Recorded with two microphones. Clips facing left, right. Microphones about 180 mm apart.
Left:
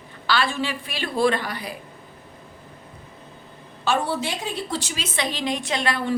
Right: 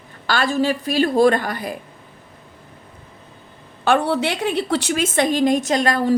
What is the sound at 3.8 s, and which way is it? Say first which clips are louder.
A woman's voice: right 6 dB; 60° right (ahead or behind).